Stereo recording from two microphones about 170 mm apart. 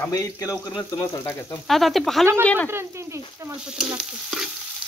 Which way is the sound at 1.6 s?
Centre (ahead or behind).